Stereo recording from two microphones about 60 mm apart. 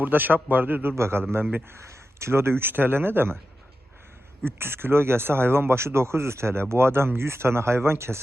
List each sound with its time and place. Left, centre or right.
0.0 s speech: right
4.4 s speech: right